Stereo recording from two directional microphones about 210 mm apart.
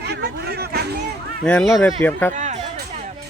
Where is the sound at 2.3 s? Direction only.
35° right (ahead or behind).